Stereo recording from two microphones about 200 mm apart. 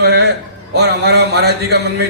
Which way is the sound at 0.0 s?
55° right (ahead or behind).